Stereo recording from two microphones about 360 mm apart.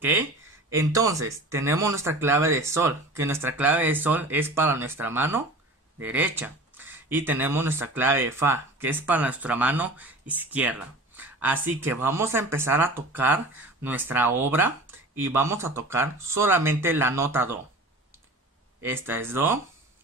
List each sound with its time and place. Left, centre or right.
0.0 s speech: centre
18.9 s speech: centre